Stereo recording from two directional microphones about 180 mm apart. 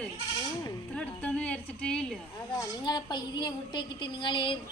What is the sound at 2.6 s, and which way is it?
A woman's voice, 25° left (ahead or behind).